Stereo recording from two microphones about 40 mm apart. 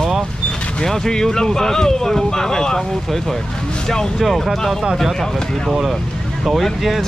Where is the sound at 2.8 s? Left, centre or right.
Centre.